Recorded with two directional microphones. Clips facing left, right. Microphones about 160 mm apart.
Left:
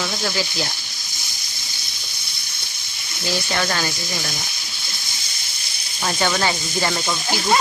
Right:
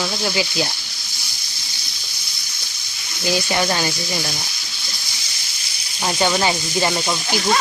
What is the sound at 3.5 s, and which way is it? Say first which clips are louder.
Speech: even; 15° right (ahead or behind).